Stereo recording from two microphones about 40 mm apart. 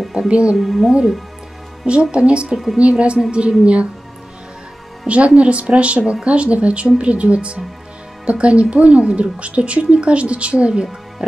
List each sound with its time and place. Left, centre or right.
0.3 s a woman's voice: right
0.6 s a woman's voice: centre
1.9 s a woman's voice: right
2.5 s a woman's voice: centre
2.8 s a woman's voice: right
5.0 s a woman's voice: right